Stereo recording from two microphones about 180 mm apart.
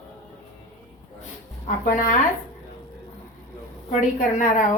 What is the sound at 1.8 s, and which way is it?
Speech, 50° left (ahead or behind).